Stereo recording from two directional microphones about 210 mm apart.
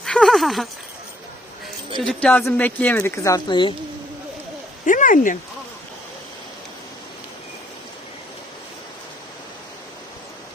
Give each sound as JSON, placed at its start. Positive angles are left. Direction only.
{"t": 0.0, "sound": "a sound", "side_deg": 0}
{"t": 2.0, "sound": "speech", "side_deg": 5}
{"t": 4.9, "sound": "speech", "side_deg": 40}